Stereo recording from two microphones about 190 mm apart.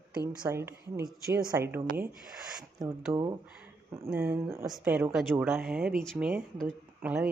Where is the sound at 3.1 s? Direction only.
20° right (ahead or behind).